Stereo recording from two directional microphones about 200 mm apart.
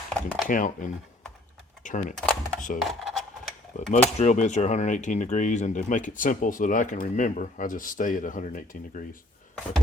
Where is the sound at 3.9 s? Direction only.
35° left (ahead or behind).